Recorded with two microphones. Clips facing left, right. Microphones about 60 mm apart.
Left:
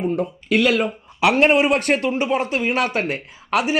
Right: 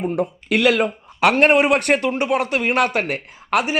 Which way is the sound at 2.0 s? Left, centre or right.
Right.